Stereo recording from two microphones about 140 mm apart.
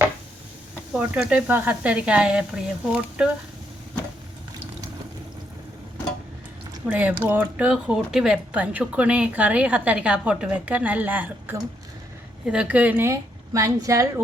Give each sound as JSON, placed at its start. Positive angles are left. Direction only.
{"t": 0.9, "sound": "speech", "side_deg": -10}
{"t": 6.8, "sound": "a woman's voice", "side_deg": -10}